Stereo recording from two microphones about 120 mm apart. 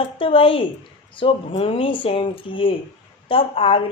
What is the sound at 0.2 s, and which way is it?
A woman's voice, 50° left (ahead or behind).